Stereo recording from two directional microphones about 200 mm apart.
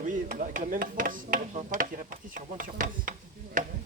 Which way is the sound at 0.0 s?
40° right (ahead or behind).